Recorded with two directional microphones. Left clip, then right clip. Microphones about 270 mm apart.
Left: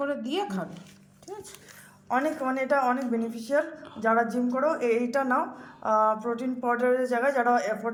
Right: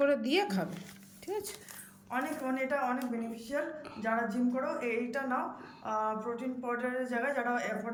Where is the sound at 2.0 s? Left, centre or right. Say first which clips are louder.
Left 8 dB; centre.